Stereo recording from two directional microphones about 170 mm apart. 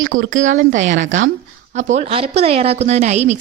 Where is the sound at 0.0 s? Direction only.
55° right (ahead or behind).